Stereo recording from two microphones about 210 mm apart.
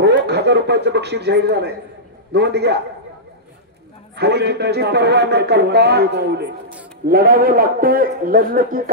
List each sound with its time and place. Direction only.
0.0 s a man's voice: 55° right (ahead or behind)
4.2 s a man's voice: 50° right (ahead or behind)